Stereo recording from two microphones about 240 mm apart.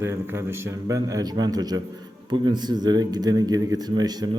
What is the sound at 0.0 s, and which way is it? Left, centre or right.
Speech, centre.